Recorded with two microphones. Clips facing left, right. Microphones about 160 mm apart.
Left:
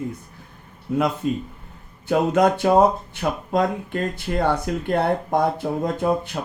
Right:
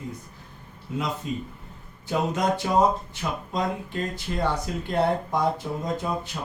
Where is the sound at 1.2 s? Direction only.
70° left (ahead or behind).